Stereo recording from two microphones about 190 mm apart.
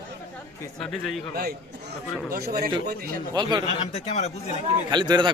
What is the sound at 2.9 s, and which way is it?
Speech, 55° right (ahead or behind).